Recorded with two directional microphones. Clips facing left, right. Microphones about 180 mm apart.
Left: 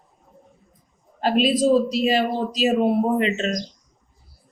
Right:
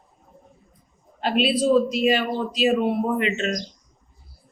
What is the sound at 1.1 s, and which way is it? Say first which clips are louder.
Speech: left 2 dB; 40° left (ahead or behind).